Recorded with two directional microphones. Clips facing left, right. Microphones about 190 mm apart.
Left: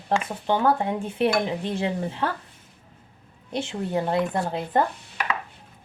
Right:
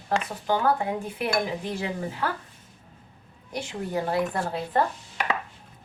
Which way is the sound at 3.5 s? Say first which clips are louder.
Left 3 dB; 25° left (ahead or behind).